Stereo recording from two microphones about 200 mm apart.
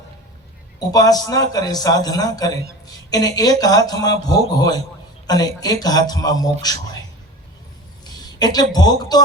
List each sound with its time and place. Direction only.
0.9 s speech: 20° left (ahead or behind)
8.0 s speech: 20° left (ahead or behind)